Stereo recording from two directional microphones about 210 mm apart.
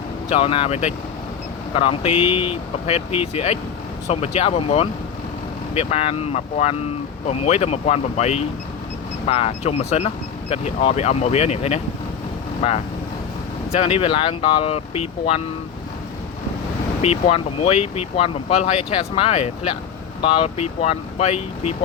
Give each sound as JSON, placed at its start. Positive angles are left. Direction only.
{"t": 0.3, "sound": "speech", "side_deg": 25}
{"t": 13.7, "sound": "speech", "side_deg": 30}
{"t": 17.0, "sound": "speech", "side_deg": 30}